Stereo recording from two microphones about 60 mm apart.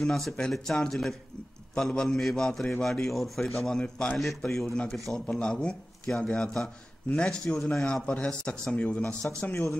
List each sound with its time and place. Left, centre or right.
0.0 s a man's voice: centre
3.8 s a man's voice: left
4.4 s speech: centre
5.3 s speech: centre